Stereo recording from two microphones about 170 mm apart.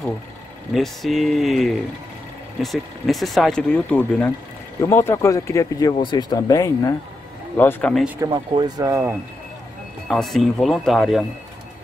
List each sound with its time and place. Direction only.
0.7 s speech: centre (ahead or behind); by 7.0 s 20° left (ahead or behind)
7.5 s speech: 10° left (ahead or behind)
8.2 s speech: 25° right (ahead or behind)
10.0 s speech: centre (ahead or behind)